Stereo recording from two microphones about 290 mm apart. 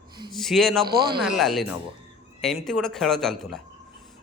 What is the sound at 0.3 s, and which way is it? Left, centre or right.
Speech, centre.